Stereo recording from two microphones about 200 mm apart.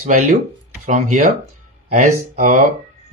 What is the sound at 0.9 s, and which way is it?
Speech, 40° right (ahead or behind).